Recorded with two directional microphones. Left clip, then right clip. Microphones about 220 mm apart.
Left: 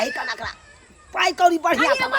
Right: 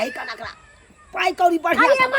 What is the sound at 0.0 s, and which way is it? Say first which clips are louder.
Snicker: left 2 dB; 20° left (ahead or behind).